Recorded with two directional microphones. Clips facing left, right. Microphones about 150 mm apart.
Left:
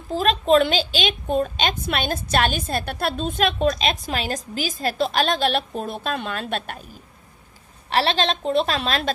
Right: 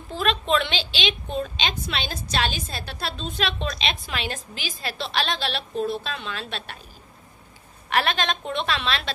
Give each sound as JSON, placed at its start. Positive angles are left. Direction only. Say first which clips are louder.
{"t": 0.1, "sound": "a woman's voice", "louder": "left 6 dB", "side_deg": 40}
{"t": 7.9, "sound": "a woman's voice", "louder": "left 3 dB", "side_deg": 30}